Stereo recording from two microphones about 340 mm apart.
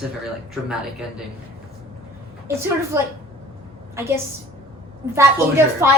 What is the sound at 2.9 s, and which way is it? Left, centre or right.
Speech, centre.